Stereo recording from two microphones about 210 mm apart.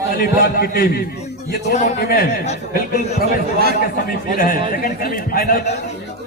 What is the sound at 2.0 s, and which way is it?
Speech, 45° left (ahead or behind).